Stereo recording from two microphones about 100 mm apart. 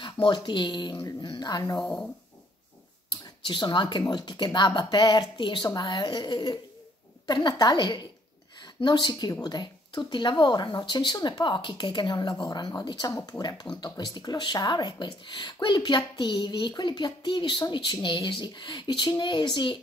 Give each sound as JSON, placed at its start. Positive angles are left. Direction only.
{"t": 0.0, "sound": "speech", "side_deg": 50}
{"t": 3.1, "sound": "speech", "side_deg": 50}